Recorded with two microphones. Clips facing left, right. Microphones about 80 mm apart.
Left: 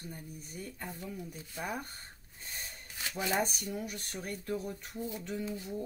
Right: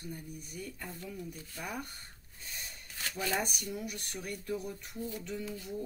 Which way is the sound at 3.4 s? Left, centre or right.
Left.